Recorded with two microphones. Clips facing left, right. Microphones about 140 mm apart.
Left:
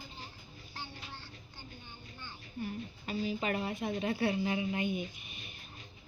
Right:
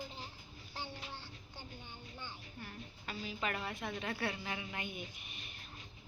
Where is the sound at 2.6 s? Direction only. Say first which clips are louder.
Left 13 dB; 15° left (ahead or behind).